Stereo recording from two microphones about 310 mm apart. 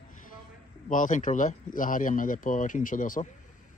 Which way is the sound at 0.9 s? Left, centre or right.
Left.